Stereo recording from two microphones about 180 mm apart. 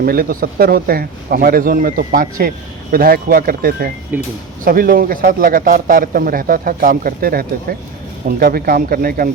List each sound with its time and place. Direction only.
0.0 s a man's voice: 55° right (ahead or behind)